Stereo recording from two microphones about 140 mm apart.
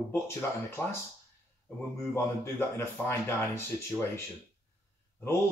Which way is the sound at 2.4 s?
15° left (ahead or behind).